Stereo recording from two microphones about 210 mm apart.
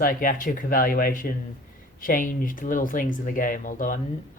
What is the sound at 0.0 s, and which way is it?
Speech, 40° left (ahead or behind).